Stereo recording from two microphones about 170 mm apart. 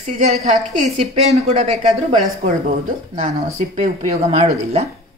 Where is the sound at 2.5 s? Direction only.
50° right (ahead or behind).